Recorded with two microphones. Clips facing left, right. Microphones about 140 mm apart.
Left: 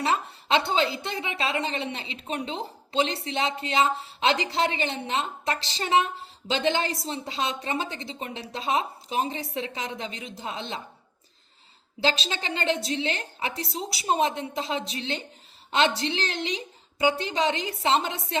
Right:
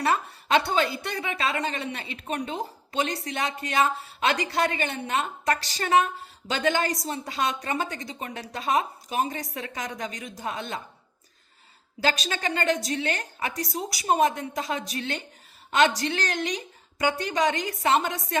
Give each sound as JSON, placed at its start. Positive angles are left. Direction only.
{"t": 0.0, "sound": "a woman's voice", "side_deg": 25}
{"t": 11.9, "sound": "speech", "side_deg": 25}